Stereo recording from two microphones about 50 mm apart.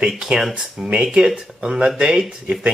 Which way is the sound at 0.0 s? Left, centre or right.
Centre.